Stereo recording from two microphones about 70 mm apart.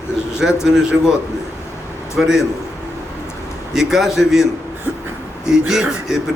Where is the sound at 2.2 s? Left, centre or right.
Centre.